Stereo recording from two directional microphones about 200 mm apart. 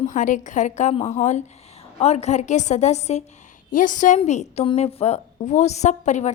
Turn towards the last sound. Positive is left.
turn(degrees=35)  # may be behind; listen again after turning